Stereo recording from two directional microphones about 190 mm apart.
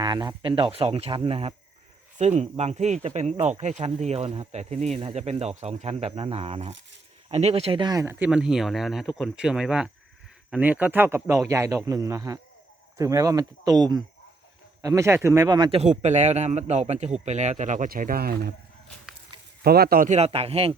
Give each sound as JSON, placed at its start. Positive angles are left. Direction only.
{"t": 0.0, "sound": "speech", "side_deg": -20}
{"t": 19.6, "sound": "speech", "side_deg": -55}